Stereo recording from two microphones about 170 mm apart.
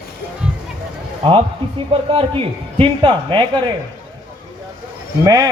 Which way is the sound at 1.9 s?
30° right (ahead or behind).